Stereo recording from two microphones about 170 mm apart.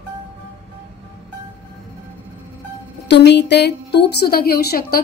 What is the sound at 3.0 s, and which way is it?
A woman's voice, 85° left.